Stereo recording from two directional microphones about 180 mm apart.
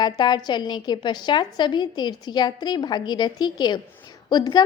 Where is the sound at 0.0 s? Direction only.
25° left (ahead or behind).